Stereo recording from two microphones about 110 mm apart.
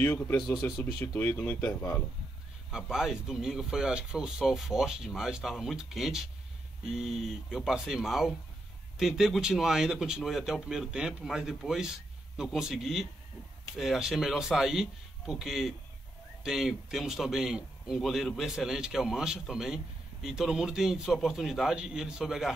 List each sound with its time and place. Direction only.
0.0 s speech: 20° left (ahead or behind)
2.7 s a man's voice: 5° right (ahead or behind)